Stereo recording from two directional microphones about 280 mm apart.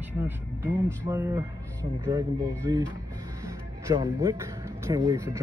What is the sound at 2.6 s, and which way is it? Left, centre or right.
Speech, centre.